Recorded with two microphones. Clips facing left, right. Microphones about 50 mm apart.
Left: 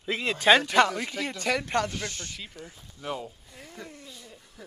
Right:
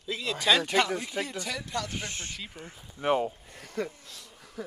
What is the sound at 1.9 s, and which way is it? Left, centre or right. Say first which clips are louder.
Speech: left 1 dB; right.